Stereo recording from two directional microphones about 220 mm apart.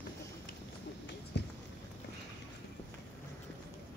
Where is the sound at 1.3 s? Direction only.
50° left (ahead or behind).